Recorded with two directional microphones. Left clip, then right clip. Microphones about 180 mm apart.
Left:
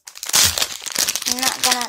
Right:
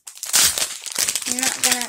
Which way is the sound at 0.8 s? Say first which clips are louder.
Left 3 dB; 5° right (ahead or behind).